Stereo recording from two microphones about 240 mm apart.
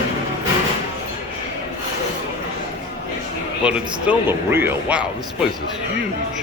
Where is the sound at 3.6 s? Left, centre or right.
Centre.